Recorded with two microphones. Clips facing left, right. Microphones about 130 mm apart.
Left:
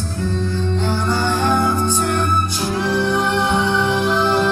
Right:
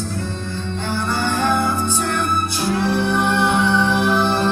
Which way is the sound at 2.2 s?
15° right (ahead or behind).